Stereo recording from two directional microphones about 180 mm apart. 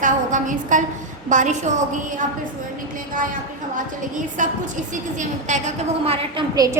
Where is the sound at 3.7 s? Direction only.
45° right (ahead or behind).